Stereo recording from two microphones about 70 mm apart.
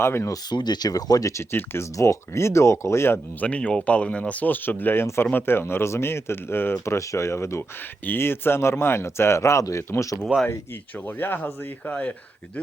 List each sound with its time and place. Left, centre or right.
0.0 s speech: left
0.5 s speech: left
3.4 s speech: centre; by 7.6 s left
8.0 s speech: left
10.9 s speech: left